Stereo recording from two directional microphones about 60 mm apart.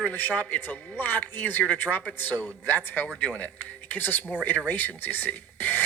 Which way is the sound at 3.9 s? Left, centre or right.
Left.